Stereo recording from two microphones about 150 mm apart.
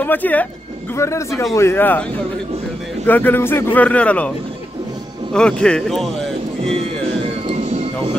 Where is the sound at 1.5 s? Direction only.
15° left (ahead or behind).